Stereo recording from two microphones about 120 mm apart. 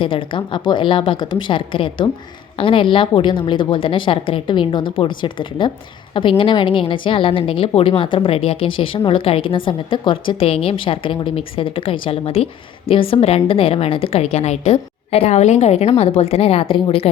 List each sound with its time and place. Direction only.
0.0 s a woman's voice: 45° left (ahead or behind)